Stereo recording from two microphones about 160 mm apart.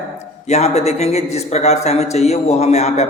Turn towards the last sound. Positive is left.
turn(degrees=40)  # may be behind; listen again after turning